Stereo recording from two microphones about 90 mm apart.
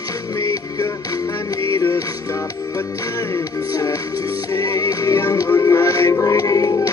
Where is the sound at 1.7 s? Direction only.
40° left (ahead or behind).